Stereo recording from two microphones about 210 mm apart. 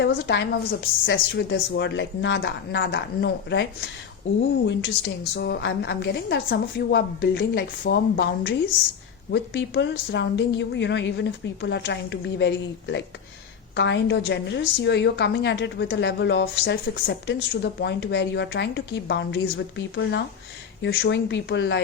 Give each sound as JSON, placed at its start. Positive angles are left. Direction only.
{"t": 0.0, "sound": "a woman's voice", "side_deg": 55}